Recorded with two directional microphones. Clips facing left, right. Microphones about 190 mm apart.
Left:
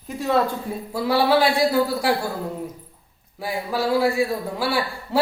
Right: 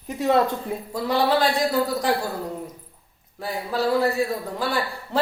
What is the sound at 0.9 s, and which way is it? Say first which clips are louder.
A man's voice: left 3 dB; 10° left (ahead or behind).